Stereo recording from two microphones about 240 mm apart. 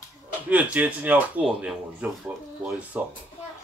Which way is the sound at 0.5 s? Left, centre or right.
Centre.